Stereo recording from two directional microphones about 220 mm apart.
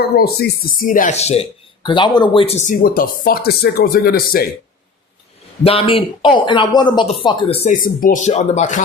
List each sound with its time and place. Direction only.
0.8 s speech: 35° left (ahead or behind)
5.6 s speech: 25° left (ahead or behind)